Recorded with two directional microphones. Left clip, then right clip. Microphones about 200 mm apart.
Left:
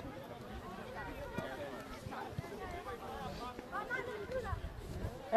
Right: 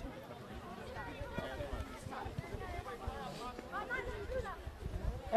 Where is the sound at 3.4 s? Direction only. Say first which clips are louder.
Even; 30° right (ahead or behind).